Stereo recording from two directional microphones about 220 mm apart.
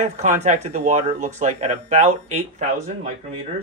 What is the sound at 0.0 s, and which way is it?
Speech, 30° right (ahead or behind).